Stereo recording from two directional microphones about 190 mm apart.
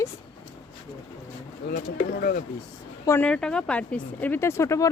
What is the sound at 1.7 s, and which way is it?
Speech, 55° left (ahead or behind).